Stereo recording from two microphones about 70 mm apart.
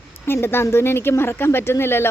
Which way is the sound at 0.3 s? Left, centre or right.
Left.